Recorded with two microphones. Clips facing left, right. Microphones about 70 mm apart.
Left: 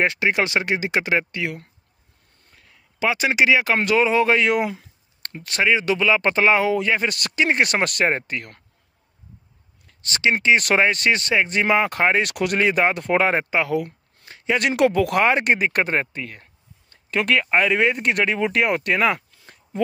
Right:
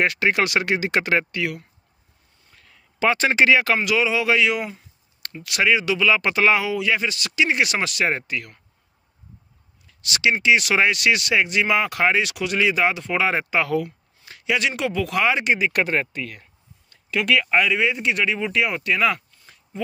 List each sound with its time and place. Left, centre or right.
0.0 s speech: left
3.0 s speech: centre
3.8 s speech: left
5.6 s speech: left
9.8 s a sound: left
10.4 s speech: left
12.3 s speech: left
13.3 s speech: left
14.2 s a sound: left
14.6 s speech: left
15.7 s speech: left
16.9 s speech: left
17.6 s speech: left
19.4 s a sound: left